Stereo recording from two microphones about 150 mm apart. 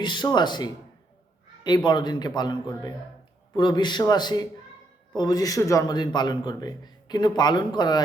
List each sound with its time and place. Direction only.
0.0 s speech: 30° left (ahead or behind)